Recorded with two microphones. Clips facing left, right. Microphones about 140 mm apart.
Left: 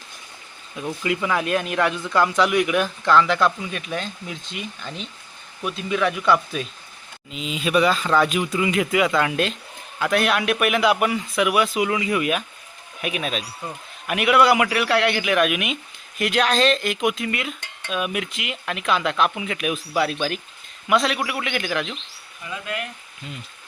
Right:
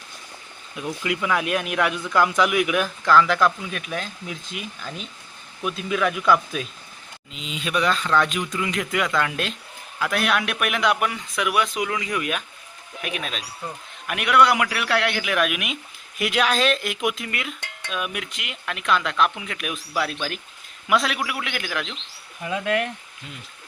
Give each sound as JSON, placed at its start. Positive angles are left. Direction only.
{"t": 0.9, "sound": "speech", "side_deg": 0}
{"t": 22.4, "sound": "speech", "side_deg": -60}